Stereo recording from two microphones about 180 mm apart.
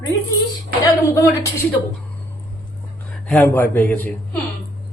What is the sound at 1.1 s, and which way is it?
Speech, 15° left (ahead or behind).